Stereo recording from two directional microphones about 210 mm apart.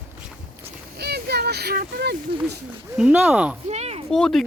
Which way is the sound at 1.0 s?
50° right (ahead or behind).